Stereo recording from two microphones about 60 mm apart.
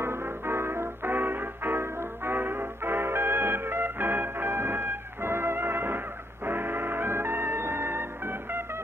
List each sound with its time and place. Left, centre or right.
0.0 s music: right